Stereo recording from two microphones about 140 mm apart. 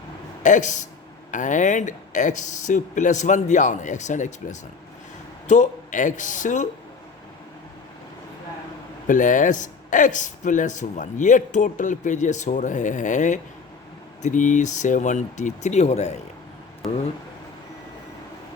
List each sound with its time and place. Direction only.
0.4 s speech: 60° left (ahead or behind)
9.0 s speech: 70° left (ahead or behind); by 16.2 s 55° left (ahead or behind)